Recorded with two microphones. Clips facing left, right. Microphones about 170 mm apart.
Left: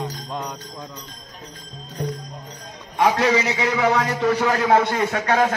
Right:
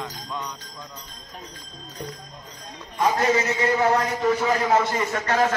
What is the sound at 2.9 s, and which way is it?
A man's voice, 75° left (ahead or behind).